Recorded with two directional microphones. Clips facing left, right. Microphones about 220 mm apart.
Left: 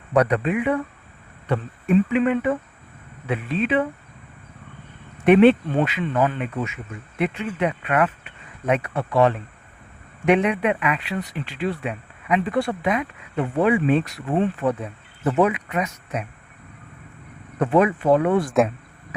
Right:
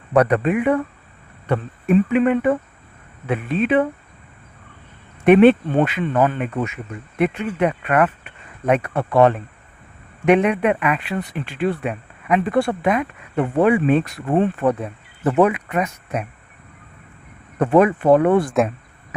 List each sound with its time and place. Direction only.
0.1 s speech: 55° right (ahead or behind)
5.2 s speech: 50° right (ahead or behind)
17.6 s speech: 50° right (ahead or behind)